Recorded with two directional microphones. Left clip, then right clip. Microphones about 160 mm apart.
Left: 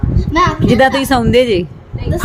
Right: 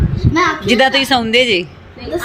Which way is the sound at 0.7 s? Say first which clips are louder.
Right 1 dB; 35° left (ahead or behind).